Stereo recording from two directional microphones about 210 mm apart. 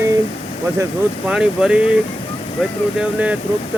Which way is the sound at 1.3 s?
5° right (ahead or behind).